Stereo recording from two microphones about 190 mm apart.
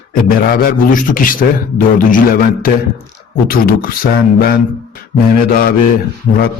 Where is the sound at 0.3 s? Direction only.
50° left (ahead or behind).